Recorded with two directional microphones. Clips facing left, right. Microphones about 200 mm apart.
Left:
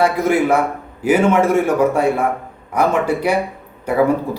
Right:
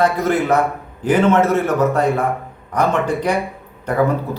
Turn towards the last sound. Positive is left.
turn(degrees=10)  # may be behind; listen again after turning